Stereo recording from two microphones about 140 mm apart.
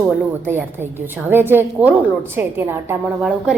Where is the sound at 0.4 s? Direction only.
15° right (ahead or behind).